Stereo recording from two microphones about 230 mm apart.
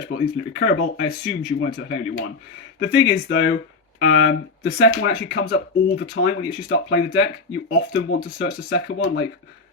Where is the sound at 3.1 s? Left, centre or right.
Left.